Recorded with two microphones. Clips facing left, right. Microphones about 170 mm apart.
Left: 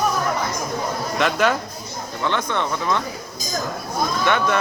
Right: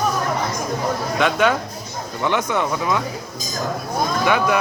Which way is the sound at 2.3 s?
10° right (ahead or behind).